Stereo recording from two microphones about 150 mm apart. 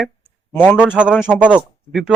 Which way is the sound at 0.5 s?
10° left (ahead or behind).